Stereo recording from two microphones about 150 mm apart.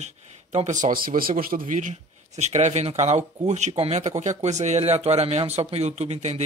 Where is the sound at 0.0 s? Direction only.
50° right (ahead or behind).